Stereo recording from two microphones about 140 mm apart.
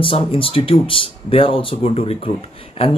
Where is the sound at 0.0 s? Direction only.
40° left (ahead or behind).